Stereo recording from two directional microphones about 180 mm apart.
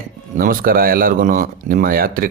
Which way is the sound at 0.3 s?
55° right (ahead or behind).